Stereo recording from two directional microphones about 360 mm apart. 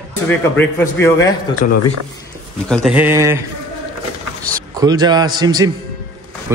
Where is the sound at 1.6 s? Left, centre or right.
Left.